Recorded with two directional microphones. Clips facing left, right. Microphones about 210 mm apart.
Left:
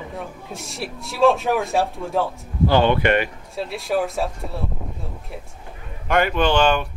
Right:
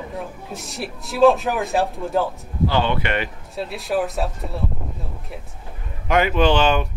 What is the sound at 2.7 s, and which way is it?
Speech, 45° left (ahead or behind).